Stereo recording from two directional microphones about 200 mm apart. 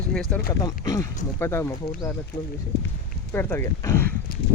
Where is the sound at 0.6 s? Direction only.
15° left (ahead or behind).